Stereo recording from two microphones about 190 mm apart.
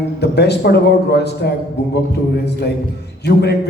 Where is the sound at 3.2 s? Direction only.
60° left (ahead or behind).